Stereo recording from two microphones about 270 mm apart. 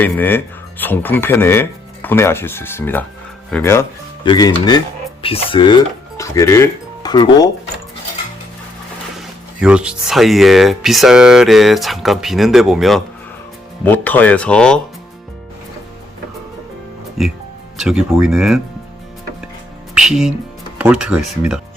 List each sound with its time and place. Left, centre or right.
0.0 s speech: centre
9.1 s speech: centre
17.2 s speech: centre
19.9 s speech: centre